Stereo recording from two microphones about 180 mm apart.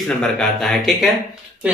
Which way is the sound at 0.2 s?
Centre (ahead or behind).